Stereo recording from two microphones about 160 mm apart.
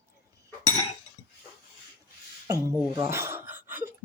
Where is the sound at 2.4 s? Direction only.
20° right (ahead or behind).